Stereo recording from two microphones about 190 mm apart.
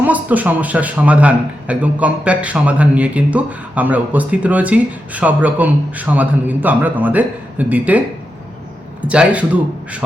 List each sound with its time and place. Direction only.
0.0 s a man's voice: 10° right (ahead or behind)